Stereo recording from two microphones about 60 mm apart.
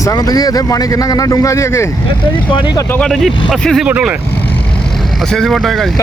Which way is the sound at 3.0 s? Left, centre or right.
Centre.